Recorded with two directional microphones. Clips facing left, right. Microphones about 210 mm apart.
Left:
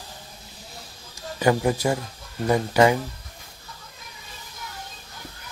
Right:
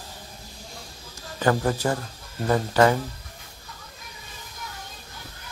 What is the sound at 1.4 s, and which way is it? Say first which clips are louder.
Speech: left 2 dB; 10° left (ahead or behind).